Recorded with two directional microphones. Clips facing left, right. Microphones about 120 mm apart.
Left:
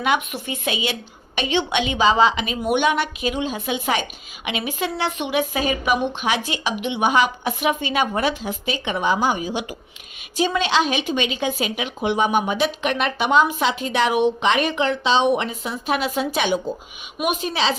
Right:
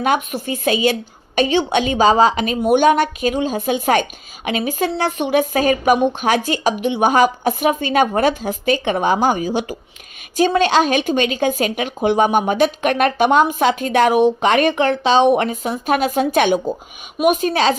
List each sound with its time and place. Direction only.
0.0 s speech: 40° right (ahead or behind)